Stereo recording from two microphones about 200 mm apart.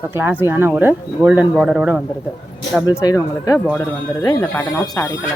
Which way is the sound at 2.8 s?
20° left (ahead or behind).